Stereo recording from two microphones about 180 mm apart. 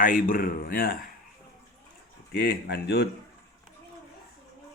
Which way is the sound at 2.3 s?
65° left (ahead or behind).